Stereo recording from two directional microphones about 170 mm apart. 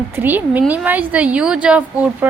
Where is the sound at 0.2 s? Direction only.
10° right (ahead or behind).